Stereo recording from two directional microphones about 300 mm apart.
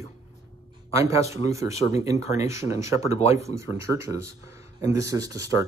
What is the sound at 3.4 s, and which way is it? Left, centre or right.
Speech, centre.